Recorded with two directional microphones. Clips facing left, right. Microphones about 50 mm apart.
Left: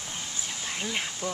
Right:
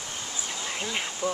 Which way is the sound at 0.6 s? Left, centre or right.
Centre.